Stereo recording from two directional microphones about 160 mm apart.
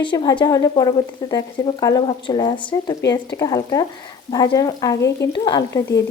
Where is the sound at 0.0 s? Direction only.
30° left (ahead or behind).